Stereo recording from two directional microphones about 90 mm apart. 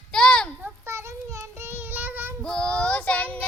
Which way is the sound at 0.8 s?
30° right (ahead or behind).